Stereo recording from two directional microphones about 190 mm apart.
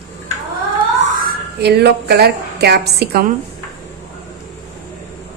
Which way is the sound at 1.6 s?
60° right (ahead or behind).